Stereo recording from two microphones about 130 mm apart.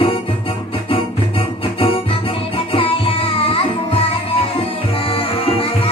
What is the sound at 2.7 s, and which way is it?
Music, 45° left (ahead or behind).